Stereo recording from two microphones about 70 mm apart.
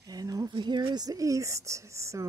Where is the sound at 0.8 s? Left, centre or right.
Right.